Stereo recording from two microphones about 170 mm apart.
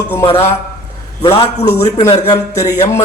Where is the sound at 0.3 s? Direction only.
35° left (ahead or behind).